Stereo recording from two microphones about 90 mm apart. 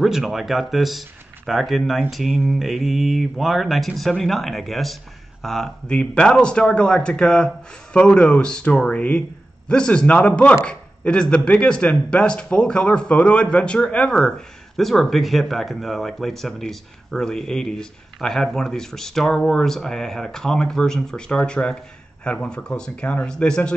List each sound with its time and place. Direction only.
0.0 s a man's voice: 5° right (ahead or behind)